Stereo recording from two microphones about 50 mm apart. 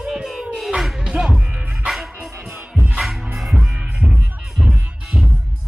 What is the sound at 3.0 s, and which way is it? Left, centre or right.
Music, centre.